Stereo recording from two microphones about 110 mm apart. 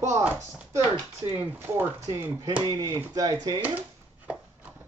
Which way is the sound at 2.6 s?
40° right (ahead or behind).